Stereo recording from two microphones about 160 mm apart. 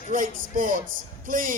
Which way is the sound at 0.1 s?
55° right (ahead or behind).